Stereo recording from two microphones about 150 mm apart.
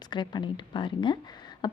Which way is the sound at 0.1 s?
30° left (ahead or behind).